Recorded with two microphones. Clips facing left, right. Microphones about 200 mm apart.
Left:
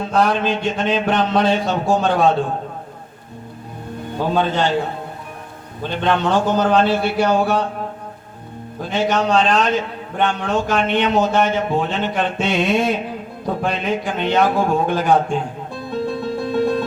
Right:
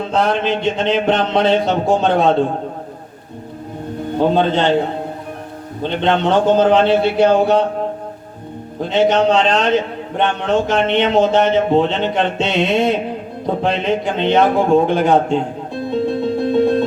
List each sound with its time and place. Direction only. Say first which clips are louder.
0.1 s speech: right 1 dB; 25° right (ahead or behind)
4.4 s speech: right 3 dB; 25° right (ahead or behind)
5.8 s speech: right 3 dB; 20° right (ahead or behind)
8.8 s speech: right 5 dB; 25° right (ahead or behind)
15.9 s music: right 5 dB; 25° right (ahead or behind)